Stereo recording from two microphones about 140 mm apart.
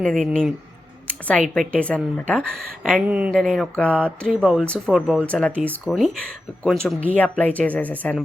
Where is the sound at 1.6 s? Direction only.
10° left (ahead or behind).